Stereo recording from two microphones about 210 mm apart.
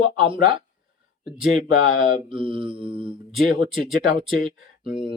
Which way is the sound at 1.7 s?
40° left (ahead or behind).